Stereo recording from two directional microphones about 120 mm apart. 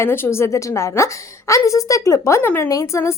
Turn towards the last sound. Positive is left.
turn(degrees=25)  # may be behind; listen again after turning